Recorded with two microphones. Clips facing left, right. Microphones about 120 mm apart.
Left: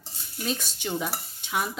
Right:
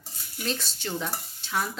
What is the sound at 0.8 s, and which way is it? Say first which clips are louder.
Stir: left 2 dB; 10° left (ahead or behind).